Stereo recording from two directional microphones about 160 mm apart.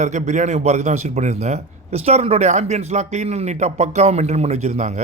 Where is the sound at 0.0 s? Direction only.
50° right (ahead or behind).